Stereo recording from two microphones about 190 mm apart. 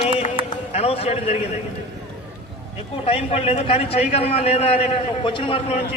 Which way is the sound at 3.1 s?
30° left (ahead or behind).